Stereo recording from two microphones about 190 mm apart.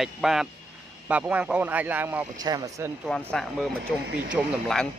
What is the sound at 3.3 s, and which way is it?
Speech, centre (ahead or behind).